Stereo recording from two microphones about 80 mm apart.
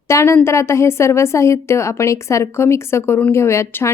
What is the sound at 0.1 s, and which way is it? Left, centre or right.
Speech, left.